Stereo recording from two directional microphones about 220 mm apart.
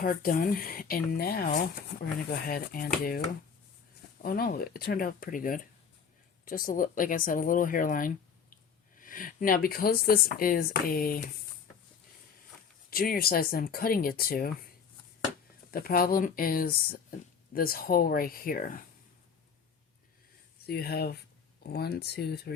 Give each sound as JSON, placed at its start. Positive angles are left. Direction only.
{"t": 0.0, "sound": "speech", "side_deg": 40}
{"t": 4.2, "sound": "speech", "side_deg": 40}
{"t": 12.9, "sound": "speech", "side_deg": 40}
{"t": 15.7, "sound": "speech", "side_deg": 40}
{"t": 20.7, "sound": "speech", "side_deg": 45}